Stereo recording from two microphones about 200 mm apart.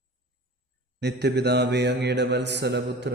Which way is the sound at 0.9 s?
55° right (ahead or behind).